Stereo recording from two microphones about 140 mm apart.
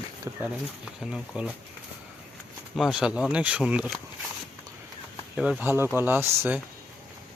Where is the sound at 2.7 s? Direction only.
Centre (ahead or behind).